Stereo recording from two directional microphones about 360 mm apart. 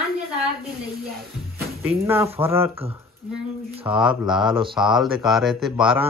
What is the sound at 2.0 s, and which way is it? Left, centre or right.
Speech, centre.